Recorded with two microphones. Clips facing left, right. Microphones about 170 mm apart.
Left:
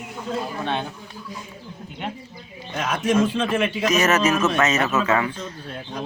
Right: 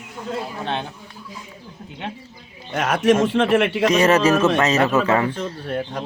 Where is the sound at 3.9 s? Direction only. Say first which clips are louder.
Right 4 dB; 30° right (ahead or behind).